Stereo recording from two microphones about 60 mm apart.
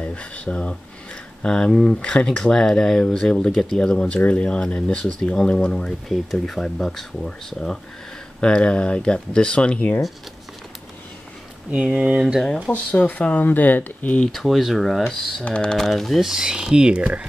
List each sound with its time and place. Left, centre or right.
0.0 s speech: left
1.7 s speech: centre
2.0 s speech: centre
11.7 s speech: right
12.7 s speech: left
14.2 s speech: centre
15.4 s speech: centre